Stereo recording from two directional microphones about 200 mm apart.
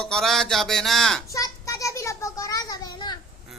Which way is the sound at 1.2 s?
15° left (ahead or behind).